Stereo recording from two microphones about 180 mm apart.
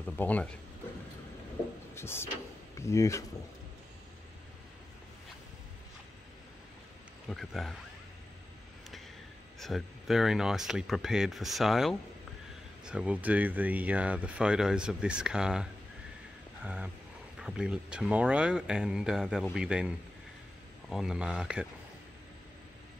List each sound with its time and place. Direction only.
0.1 s speech: 10° left (ahead or behind)
2.0 s speech: 15° left (ahead or behind)
7.2 s speech: centre (ahead or behind)
9.6 s speech: centre (ahead or behind)
20.9 s speech: 5° right (ahead or behind)